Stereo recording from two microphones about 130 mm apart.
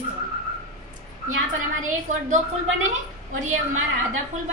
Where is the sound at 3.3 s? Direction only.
75° right (ahead or behind).